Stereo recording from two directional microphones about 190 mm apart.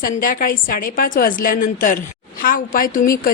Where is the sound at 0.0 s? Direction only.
45° left (ahead or behind).